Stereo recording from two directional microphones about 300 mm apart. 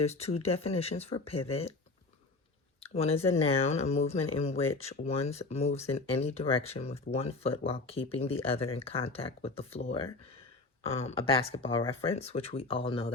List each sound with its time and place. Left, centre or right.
0.0 s speech: left
2.8 s speech: centre